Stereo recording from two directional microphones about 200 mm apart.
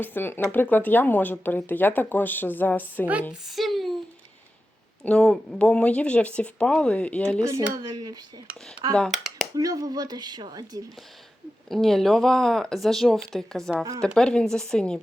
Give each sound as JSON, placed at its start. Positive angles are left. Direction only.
{"t": 0.0, "sound": "speech", "side_deg": 10}
{"t": 3.4, "sound": "a sound", "side_deg": 0}
{"t": 5.0, "sound": "speech", "side_deg": 5}
{"t": 7.4, "sound": "a woman's voice", "side_deg": -15}
{"t": 9.0, "sound": "speech", "side_deg": 0}
{"t": 9.6, "sound": "a woman's voice", "side_deg": -20}
{"t": 11.7, "sound": "speech", "side_deg": 0}